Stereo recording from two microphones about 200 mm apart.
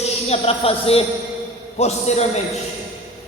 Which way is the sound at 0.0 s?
30° left (ahead or behind).